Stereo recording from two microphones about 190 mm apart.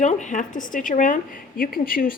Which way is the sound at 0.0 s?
40° left (ahead or behind).